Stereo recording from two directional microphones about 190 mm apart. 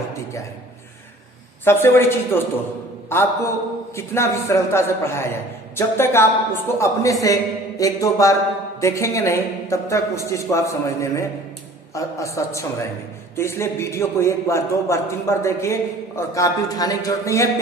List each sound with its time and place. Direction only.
1.6 s a man's voice: 15° left (ahead or behind)